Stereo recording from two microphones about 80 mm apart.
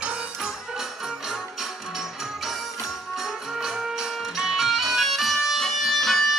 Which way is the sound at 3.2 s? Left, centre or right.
Centre.